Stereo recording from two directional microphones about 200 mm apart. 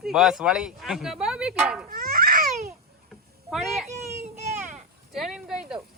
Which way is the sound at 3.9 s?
35° right (ahead or behind).